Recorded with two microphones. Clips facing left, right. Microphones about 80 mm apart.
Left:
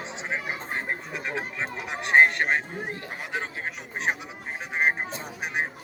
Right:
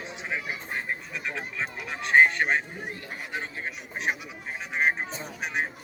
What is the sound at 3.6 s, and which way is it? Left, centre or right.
Speech, left.